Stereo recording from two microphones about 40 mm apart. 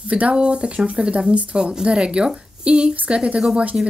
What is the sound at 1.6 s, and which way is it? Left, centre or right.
Speech, right.